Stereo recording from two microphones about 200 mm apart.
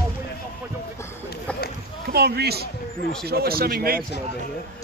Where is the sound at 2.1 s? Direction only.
50° right (ahead or behind).